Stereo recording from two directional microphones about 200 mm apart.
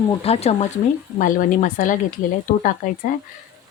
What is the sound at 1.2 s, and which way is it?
Speech, 40° left (ahead or behind).